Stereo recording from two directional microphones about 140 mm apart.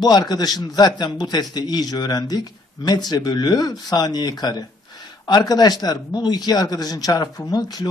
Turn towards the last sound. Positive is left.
turn(degrees=30)  # may be behind; listen again after turning